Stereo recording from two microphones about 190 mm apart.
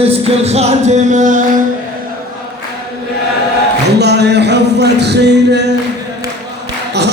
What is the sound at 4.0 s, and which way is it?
Music, 60° right (ahead or behind).